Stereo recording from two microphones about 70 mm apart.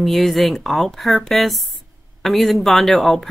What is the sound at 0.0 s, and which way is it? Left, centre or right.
A woman's voice, centre.